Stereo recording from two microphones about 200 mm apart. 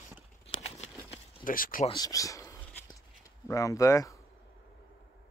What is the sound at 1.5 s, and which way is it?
Speech, 45° left (ahead or behind).